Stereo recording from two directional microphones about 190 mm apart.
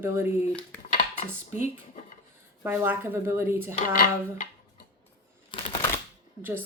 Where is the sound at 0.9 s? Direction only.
40° left (ahead or behind).